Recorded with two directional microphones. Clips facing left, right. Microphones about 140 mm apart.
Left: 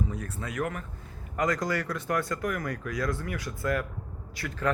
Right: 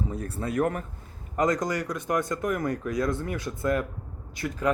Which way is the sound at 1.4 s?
20° right (ahead or behind).